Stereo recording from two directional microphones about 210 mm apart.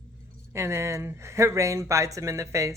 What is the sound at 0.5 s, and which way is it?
Speech, 15° right (ahead or behind).